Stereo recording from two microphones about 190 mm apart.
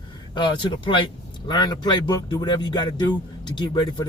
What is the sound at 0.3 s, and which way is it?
Speech, 25° left (ahead or behind).